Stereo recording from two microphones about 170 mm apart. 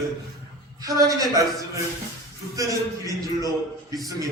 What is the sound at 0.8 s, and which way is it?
Speech, 20° right (ahead or behind).